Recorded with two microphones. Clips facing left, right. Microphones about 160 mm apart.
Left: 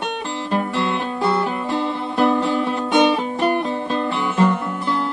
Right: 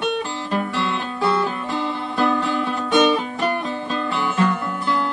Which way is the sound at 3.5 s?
30° left (ahead or behind).